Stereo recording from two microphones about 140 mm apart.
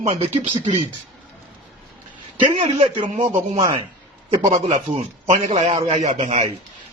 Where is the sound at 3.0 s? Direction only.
55° right (ahead or behind).